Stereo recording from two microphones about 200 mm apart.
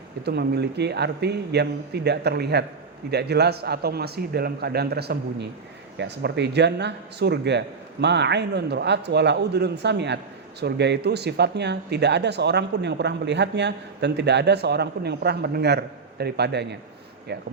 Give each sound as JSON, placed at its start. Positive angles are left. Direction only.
{"t": 0.3, "sound": "a man's voice", "side_deg": -55}